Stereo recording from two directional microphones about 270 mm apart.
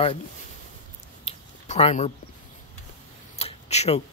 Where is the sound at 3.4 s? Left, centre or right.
Left.